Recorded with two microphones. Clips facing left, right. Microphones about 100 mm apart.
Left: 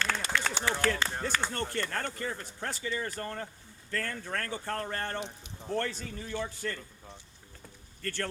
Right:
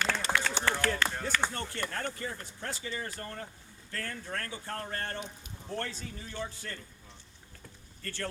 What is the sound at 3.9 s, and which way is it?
Speech, 70° left (ahead or behind).